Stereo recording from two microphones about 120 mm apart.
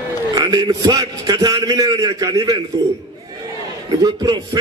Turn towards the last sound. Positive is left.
turn(degrees=-35)  # may be behind; listen again after turning